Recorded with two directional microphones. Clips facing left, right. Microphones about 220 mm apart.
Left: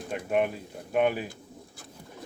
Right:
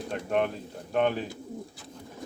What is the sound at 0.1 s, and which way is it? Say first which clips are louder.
Speech: left 1 dB; 10° left (ahead or behind).